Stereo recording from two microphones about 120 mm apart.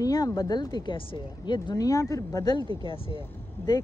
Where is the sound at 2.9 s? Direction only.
50° left (ahead or behind).